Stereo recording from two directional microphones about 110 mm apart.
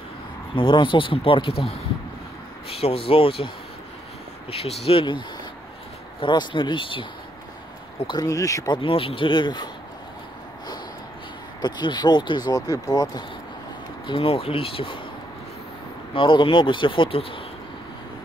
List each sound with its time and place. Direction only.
0.6 s speech: 45° left (ahead or behind)
2.7 s speech: 60° left (ahead or behind)
6.2 s speech: 45° left (ahead or behind)
8.1 s speech: 35° left (ahead or behind)
8.7 s speech: 55° left (ahead or behind)
11.6 s speech: 40° left (ahead or behind)
14.0 s speech: 55° left (ahead or behind)
16.1 s speech: 50° left (ahead or behind)